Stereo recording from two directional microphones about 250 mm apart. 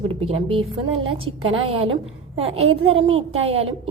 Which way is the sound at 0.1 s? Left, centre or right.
Right.